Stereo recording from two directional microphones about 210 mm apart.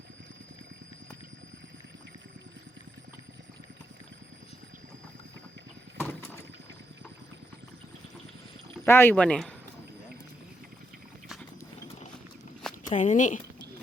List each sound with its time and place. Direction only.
6.0 s a sound: 10° left (ahead or behind)
8.8 s speech: 10° left (ahead or behind)
12.9 s speech: 35° left (ahead or behind)